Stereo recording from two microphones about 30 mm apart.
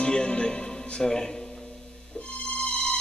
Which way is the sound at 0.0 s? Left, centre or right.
Left.